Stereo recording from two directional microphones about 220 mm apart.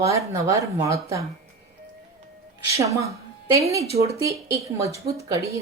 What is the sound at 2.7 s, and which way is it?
A woman's voice, 15° right (ahead or behind).